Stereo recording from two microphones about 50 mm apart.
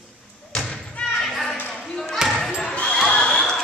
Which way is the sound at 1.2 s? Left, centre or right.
Centre.